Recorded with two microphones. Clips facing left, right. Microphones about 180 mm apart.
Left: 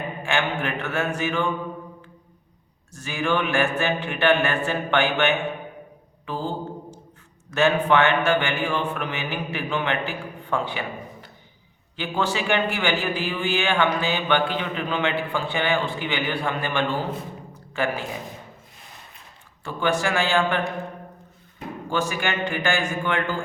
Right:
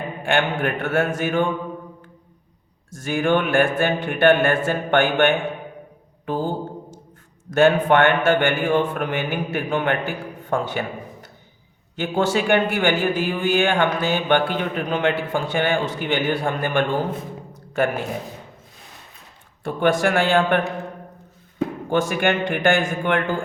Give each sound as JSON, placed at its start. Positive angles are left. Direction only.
{"t": 0.3, "sound": "a man's voice", "side_deg": -55}
{"t": 3.0, "sound": "a man's voice", "side_deg": -55}
{"t": 6.2, "sound": "mantra", "side_deg": -55}
{"t": 7.5, "sound": "a man's voice", "side_deg": -50}
{"t": 11.9, "sound": "a man's voice", "side_deg": -50}
{"t": 19.6, "sound": "a man's voice", "side_deg": -55}
{"t": 21.8, "sound": "a man's voice", "side_deg": -60}